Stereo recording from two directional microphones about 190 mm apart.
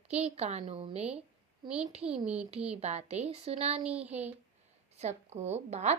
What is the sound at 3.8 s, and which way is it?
Speech, 5° right (ahead or behind).